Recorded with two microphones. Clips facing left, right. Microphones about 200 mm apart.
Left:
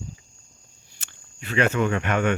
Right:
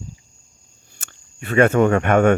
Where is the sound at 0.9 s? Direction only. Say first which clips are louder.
Right 6 dB; 50° right (ahead or behind).